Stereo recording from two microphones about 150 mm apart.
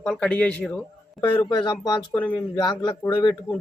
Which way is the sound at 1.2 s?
30° left (ahead or behind).